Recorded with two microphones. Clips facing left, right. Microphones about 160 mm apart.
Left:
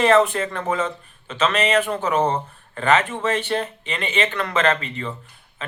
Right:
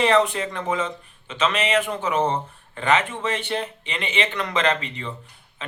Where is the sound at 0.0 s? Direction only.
50° left (ahead or behind).